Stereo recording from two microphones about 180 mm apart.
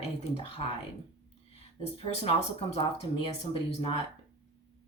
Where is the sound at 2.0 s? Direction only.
35° left (ahead or behind).